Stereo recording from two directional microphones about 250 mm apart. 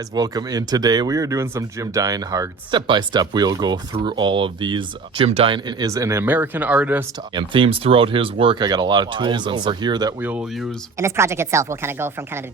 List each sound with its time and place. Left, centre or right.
0.1 s speech: centre
7.3 s speech: centre